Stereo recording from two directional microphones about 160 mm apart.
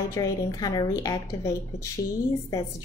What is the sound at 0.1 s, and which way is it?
A woman's voice, 20° left (ahead or behind).